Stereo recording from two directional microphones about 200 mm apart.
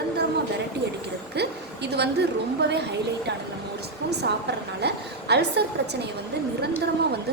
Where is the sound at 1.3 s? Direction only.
55° right (ahead or behind).